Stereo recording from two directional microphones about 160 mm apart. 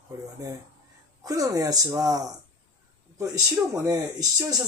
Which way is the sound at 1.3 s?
20° right (ahead or behind).